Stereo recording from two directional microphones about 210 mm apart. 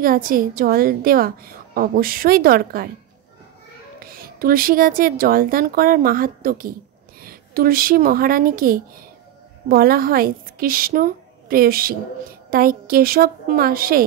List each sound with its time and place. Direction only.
0.0 s a woman's voice: 45° right (ahead or behind)
4.0 s a woman's voice: 45° right (ahead or behind)